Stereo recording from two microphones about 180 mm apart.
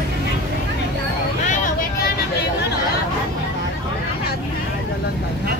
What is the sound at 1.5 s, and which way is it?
Vehicle, 45° left (ahead or behind).